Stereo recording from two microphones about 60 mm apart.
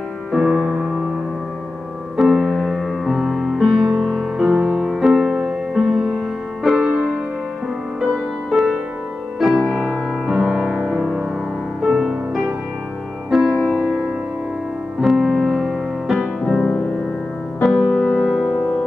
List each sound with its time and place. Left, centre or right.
0.3 s music: centre
2.1 s music: centre
4.4 s music: centre
6.9 s music: centre
8.5 s music: centre
11.0 s music: centre
15.0 s music: centre
16.4 s music: centre
17.7 s music: centre